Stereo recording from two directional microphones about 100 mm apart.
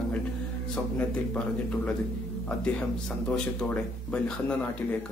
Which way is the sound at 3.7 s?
10° left (ahead or behind).